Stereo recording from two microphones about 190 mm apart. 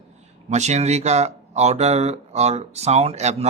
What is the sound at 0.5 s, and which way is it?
Speech, 35° right (ahead or behind).